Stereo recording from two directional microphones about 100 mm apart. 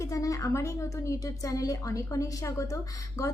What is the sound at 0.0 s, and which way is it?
A woman's voice, 35° left (ahead or behind).